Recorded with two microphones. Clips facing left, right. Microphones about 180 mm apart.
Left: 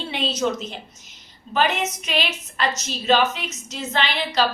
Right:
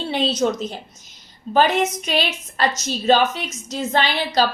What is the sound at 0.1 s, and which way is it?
Speech, 35° right (ahead or behind).